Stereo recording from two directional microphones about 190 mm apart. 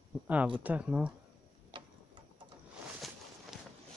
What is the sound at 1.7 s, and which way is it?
Tick-tock, 25° right (ahead or behind).